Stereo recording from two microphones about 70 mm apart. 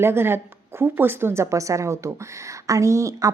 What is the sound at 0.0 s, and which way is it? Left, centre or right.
A woman's voice, right.